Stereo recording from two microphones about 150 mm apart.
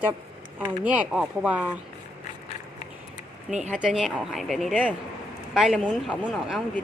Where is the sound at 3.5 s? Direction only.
50° right (ahead or behind).